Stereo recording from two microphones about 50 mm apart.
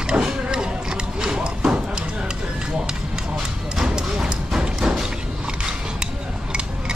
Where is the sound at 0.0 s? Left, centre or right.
Centre.